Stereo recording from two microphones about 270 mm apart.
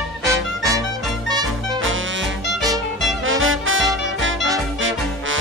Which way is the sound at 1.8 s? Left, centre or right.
Right.